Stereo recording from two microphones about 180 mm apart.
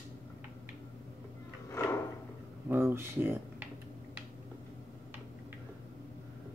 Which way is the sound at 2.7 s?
15° right (ahead or behind).